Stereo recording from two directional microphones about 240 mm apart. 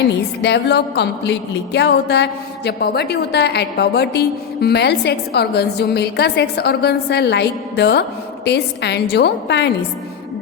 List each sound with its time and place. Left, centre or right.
0.1 s a woman's voice: left